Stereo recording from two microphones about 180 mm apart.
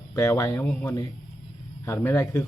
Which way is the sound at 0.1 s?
15° left (ahead or behind).